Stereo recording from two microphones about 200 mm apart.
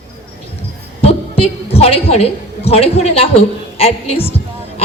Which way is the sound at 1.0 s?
30° left (ahead or behind).